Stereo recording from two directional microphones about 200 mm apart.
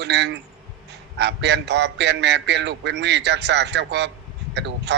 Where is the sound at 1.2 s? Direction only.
60° right (ahead or behind).